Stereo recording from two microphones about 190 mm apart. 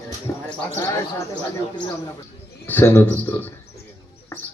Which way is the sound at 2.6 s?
10° left (ahead or behind).